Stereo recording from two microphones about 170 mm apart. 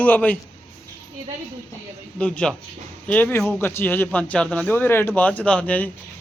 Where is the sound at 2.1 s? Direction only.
5° left (ahead or behind).